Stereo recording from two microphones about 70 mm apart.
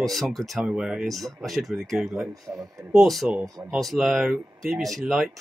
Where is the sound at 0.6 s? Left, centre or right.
Centre.